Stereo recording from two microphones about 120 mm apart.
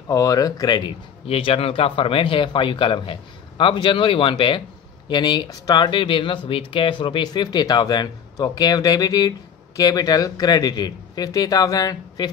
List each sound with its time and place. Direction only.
0.1 s speech: 30° left (ahead or behind)
1.2 s speech: 55° left (ahead or behind); by 5.9 s 35° left (ahead or behind)
5.9 s speech: 45° left (ahead or behind)